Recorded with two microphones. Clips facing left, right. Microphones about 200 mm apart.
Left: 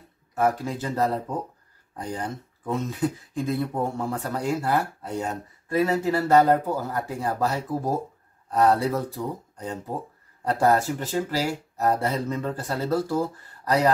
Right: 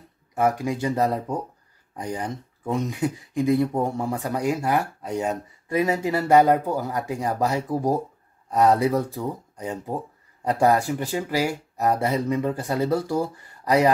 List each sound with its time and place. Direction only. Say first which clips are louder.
0.3 s speech: right 2 dB; 15° right (ahead or behind)